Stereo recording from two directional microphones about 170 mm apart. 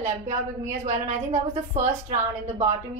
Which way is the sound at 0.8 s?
45° right (ahead or behind).